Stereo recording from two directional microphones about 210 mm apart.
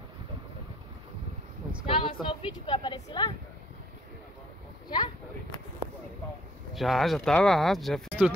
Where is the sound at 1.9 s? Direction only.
25° left (ahead or behind).